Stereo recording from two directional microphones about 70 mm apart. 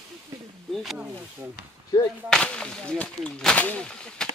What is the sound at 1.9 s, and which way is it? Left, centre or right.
Speech, left.